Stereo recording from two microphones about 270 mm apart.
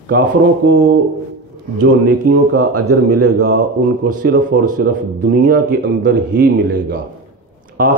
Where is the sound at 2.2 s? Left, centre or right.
Right.